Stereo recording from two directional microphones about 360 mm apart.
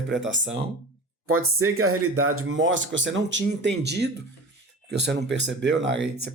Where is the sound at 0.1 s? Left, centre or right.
Right.